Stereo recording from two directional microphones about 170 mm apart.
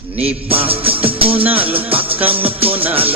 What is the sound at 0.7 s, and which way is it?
Music, 35° right (ahead or behind).